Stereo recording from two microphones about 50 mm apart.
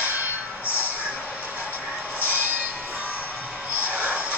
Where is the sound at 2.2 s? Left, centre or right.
Right.